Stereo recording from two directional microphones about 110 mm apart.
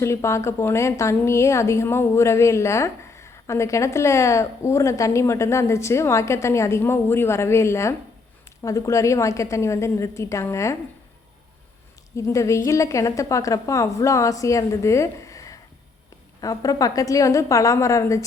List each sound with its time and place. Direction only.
0.0 s a woman's voice: 25° left (ahead or behind)
12.1 s a woman's voice: 30° left (ahead or behind)